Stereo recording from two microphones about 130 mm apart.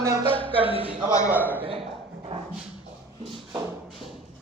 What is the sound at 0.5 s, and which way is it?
Speech, 45° right (ahead or behind).